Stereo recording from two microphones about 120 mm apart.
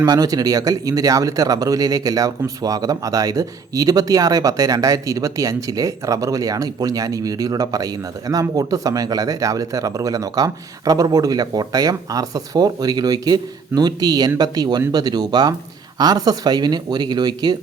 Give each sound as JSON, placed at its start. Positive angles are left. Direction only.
{"t": 0.0, "sound": "speech", "side_deg": -30}